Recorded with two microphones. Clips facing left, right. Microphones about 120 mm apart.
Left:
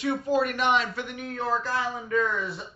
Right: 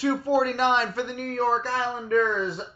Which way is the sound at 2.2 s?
30° right (ahead or behind).